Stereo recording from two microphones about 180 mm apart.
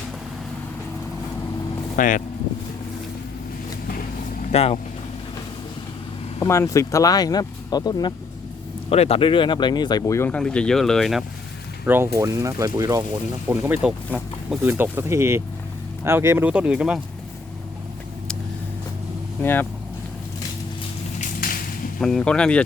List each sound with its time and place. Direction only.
2.0 s speech: 50° left (ahead or behind)
4.5 s speech: 35° left (ahead or behind)
6.4 s speech: 15° left (ahead or behind)
8.9 s speech: 35° left (ahead or behind); by 11.3 s centre (ahead or behind)
11.9 s speech: 15° right (ahead or behind)
13.5 s speech: 10° right (ahead or behind)
19.4 s speech: 10° left (ahead or behind)
22.0 s speech: 5° left (ahead or behind)